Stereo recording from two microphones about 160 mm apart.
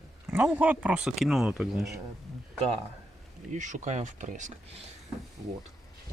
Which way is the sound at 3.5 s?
50° right (ahead or behind).